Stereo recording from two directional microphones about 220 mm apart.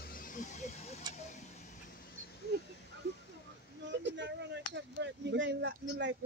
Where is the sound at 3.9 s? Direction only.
55° right (ahead or behind).